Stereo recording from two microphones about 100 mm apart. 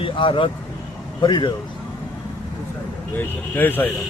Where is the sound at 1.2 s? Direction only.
45° left (ahead or behind).